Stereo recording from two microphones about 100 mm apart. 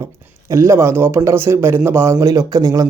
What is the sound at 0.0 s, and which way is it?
A man's voice, 30° right (ahead or behind).